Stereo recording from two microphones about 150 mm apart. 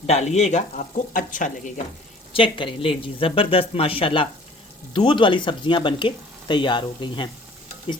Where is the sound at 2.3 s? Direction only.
35° left (ahead or behind).